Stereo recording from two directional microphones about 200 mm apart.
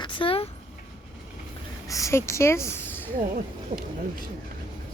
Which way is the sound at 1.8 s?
15° left (ahead or behind).